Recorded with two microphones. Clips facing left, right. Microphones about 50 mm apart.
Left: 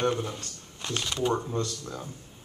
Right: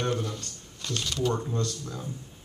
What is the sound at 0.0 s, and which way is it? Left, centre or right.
Speech, left.